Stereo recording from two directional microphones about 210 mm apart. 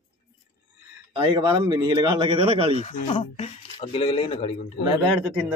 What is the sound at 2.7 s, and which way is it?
Speech, 35° left (ahead or behind).